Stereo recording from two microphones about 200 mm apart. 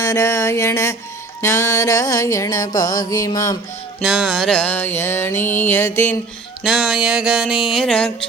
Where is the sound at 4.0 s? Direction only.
Centre (ahead or behind).